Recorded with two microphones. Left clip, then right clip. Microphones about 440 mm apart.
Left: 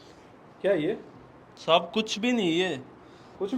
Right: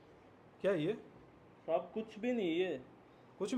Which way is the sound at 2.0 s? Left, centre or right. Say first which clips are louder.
Left 11 dB; centre.